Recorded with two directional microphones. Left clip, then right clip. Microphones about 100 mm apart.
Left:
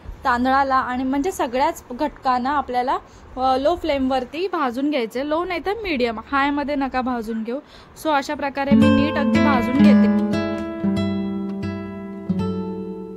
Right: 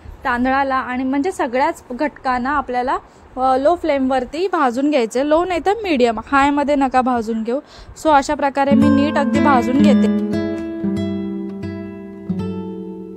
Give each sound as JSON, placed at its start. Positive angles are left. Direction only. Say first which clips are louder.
{"t": 0.2, "sound": "a woman's voice", "louder": "right 1 dB", "side_deg": -25}
{"t": 9.9, "sound": "music", "louder": "right 1 dB", "side_deg": 0}